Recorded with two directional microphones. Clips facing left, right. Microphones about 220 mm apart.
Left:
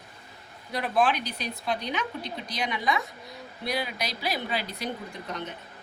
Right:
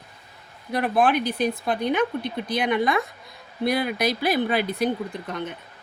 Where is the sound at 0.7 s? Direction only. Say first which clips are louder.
Right 5 dB; 55° right (ahead or behind).